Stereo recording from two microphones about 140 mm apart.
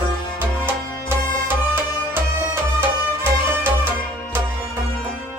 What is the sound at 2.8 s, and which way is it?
Music, 15° right (ahead or behind).